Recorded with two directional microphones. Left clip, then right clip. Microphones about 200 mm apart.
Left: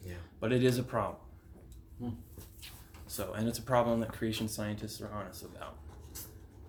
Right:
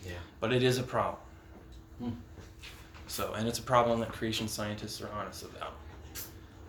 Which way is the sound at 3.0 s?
50° left (ahead or behind).